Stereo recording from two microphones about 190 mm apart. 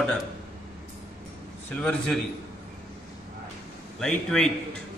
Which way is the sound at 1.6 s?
5° left (ahead or behind).